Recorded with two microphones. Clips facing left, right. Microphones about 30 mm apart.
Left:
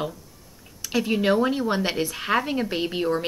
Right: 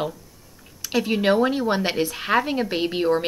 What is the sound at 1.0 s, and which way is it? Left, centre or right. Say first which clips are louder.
A woman's voice: right 2 dB; right.